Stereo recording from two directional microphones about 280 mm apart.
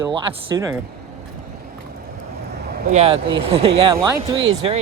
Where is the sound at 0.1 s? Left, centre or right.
Centre.